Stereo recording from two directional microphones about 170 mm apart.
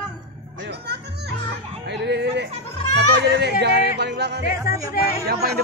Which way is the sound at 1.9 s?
85° right.